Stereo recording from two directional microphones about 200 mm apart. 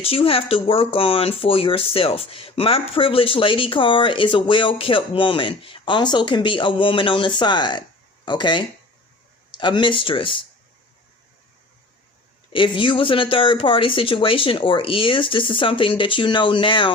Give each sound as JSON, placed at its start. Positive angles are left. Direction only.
{"t": 0.0, "sound": "speech", "side_deg": 30}
{"t": 12.5, "sound": "speech", "side_deg": 25}